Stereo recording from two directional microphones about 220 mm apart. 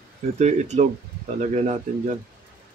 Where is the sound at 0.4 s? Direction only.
30° right (ahead or behind).